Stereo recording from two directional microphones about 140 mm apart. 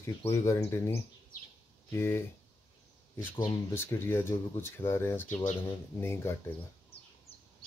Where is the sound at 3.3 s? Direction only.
20° left (ahead or behind).